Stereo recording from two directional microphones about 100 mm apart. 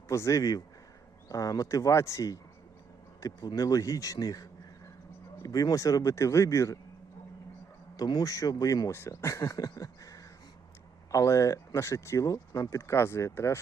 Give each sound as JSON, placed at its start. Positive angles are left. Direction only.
{"t": 0.1, "sound": "speech", "side_deg": 30}
{"t": 7.9, "sound": "speech", "side_deg": 40}